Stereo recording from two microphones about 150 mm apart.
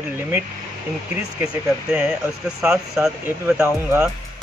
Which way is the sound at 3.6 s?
20° right (ahead or behind).